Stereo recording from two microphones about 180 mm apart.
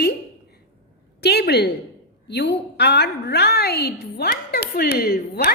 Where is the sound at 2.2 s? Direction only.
70° left (ahead or behind).